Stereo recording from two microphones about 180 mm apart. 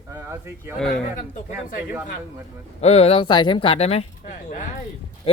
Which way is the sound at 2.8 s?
35° left (ahead or behind).